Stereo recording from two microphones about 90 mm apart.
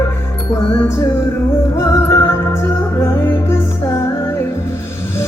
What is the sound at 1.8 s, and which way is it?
Music, 30° left (ahead or behind).